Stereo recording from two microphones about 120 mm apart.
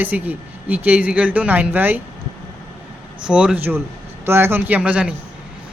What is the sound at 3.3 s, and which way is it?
Speech, 10° right (ahead or behind).